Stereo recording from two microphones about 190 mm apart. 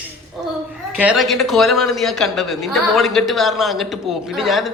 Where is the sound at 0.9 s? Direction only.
5° right (ahead or behind).